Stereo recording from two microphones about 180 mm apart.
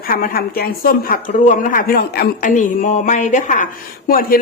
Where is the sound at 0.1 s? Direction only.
55° left (ahead or behind).